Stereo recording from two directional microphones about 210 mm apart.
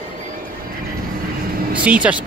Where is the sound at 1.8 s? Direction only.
5° right (ahead or behind).